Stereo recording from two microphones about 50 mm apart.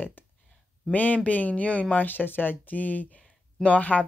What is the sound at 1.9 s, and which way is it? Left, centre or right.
Speech, left.